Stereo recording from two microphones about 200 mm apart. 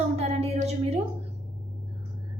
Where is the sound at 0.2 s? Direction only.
30° right (ahead or behind).